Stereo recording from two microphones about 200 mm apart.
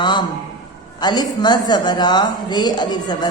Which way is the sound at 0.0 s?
20° left (ahead or behind).